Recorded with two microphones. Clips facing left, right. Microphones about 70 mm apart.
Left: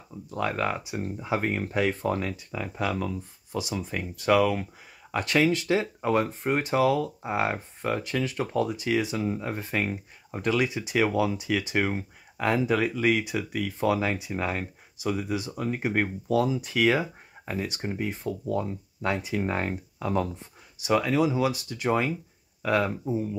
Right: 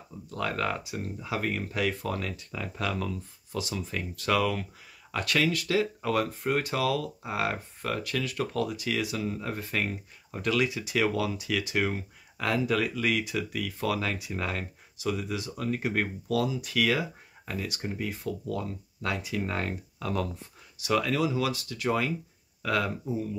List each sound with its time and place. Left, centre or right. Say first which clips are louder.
0.3 s speech: left 2 dB; centre